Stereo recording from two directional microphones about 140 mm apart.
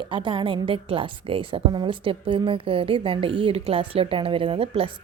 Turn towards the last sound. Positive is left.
turn(degrees=-40)  # may be behind; listen again after turning